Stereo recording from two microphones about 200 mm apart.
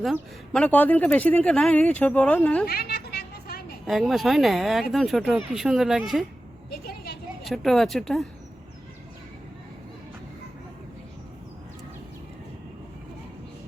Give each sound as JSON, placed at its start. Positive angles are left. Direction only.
{"t": 0.0, "sound": "speech", "side_deg": 0}
{"t": 2.6, "sound": "a sound", "side_deg": 50}
{"t": 3.8, "sound": "speech", "side_deg": 0}
{"t": 6.7, "sound": "vehicle", "side_deg": 50}
{"t": 7.4, "sound": "speech", "side_deg": 0}